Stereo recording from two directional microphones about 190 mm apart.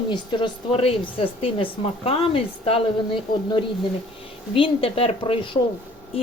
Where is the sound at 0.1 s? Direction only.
25° left (ahead or behind).